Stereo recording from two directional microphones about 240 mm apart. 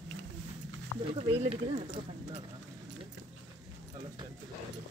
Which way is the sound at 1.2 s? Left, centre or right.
Right.